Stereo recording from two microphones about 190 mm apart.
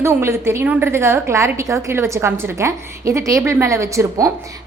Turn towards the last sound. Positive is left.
turn(degrees=-15)  # may be behind; listen again after turning